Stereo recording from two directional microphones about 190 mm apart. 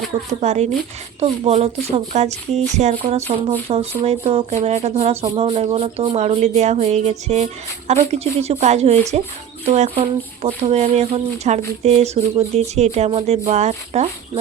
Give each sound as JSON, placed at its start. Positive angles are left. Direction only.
{"t": 0.3, "sound": "speech", "side_deg": -35}